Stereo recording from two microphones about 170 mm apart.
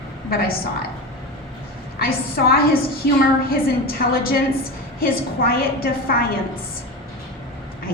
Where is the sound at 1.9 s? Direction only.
60° left (ahead or behind).